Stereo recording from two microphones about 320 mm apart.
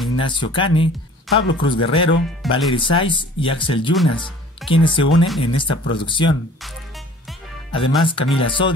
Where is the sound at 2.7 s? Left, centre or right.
Centre.